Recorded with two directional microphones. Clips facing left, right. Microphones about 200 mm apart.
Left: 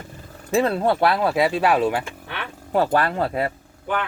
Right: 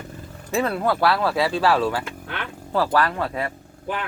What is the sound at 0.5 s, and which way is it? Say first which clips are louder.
Speech: left 3 dB; 30° left (ahead or behind).